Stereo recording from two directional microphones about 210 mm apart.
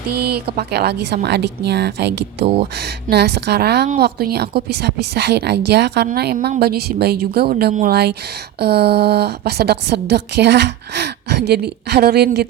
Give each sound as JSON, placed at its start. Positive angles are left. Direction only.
{"t": 0.1, "sound": "a woman's voice", "side_deg": -50}